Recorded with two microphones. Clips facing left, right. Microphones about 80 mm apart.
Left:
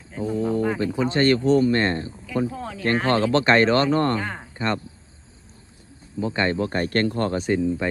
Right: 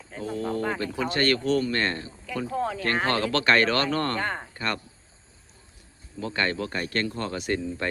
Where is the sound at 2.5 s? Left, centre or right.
Centre.